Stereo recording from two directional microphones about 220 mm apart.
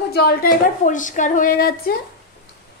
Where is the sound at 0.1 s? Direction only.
45° left (ahead or behind).